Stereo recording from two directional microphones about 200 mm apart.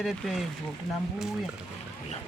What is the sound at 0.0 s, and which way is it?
Speech, centre (ahead or behind).